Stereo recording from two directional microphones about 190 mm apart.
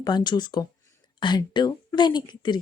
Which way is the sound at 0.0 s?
20° left (ahead or behind).